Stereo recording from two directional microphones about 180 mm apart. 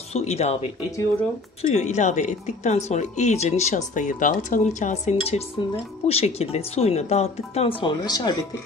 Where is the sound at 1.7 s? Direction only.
40° left (ahead or behind).